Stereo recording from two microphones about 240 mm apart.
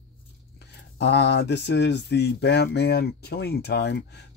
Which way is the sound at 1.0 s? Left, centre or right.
Left.